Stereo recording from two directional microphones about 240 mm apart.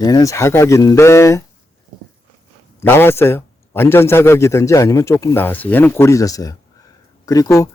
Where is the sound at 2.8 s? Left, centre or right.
Centre.